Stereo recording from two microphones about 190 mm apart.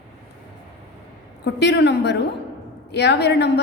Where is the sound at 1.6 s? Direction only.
65° left (ahead or behind).